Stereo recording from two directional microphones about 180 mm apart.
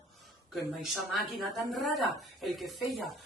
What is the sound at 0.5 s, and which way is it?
A woman's voice, centre (ahead or behind).